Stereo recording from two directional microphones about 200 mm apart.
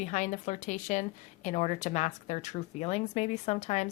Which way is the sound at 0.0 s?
40° left (ahead or behind).